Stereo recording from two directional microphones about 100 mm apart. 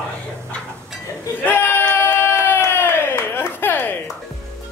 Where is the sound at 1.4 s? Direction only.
20° left (ahead or behind).